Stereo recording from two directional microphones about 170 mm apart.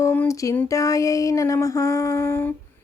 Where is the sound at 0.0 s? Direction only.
15° left (ahead or behind).